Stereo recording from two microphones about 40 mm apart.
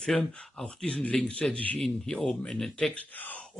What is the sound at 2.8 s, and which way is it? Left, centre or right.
Speech, left.